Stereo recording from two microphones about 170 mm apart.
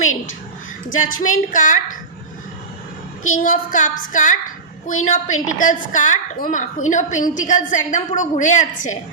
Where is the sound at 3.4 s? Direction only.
50° left (ahead or behind).